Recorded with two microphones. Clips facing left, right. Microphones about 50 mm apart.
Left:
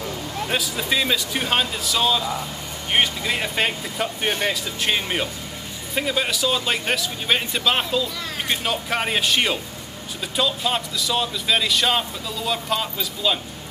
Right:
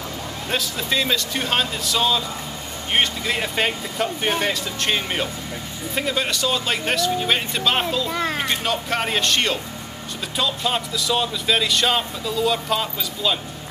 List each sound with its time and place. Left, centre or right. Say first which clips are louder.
0.5 s speech: even; centre
8.1 s a child's voice: right 8 dB; right
8.5 s speech: right 1 dB; centre